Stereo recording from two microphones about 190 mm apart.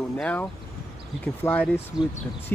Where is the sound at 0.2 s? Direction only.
5° left (ahead or behind).